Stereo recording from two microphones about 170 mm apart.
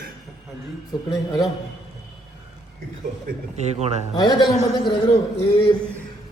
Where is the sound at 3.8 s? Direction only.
40° right (ahead or behind).